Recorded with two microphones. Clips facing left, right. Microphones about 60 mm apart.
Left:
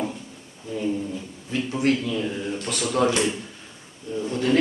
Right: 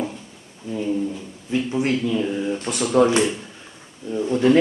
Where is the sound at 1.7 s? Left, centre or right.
Centre.